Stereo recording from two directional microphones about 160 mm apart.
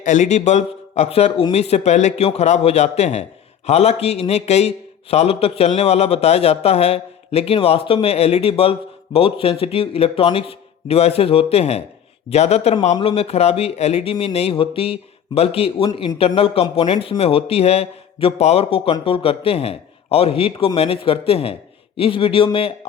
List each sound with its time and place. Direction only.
0.0 s a man's voice: 50° left (ahead or behind)